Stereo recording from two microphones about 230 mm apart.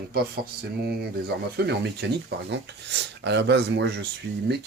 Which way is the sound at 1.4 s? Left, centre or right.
Right.